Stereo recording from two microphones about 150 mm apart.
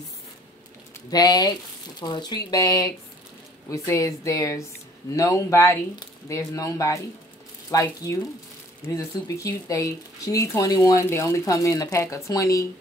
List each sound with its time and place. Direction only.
1.1 s speech: 25° left (ahead or behind)